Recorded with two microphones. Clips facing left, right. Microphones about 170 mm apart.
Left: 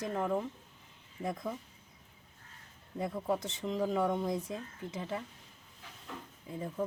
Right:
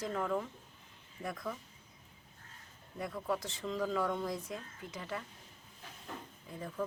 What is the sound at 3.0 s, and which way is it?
Speech, 25° left (ahead or behind).